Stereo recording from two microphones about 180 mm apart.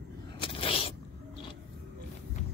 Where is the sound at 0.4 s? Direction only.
30° left (ahead or behind).